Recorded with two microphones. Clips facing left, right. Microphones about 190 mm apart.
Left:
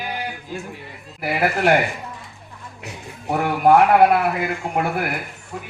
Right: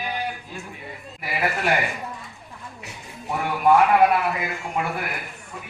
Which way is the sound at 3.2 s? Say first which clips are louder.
Left 3 dB; 65° left (ahead or behind).